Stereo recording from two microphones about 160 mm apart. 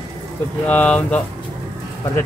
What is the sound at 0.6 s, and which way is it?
Speech, 10° left (ahead or behind).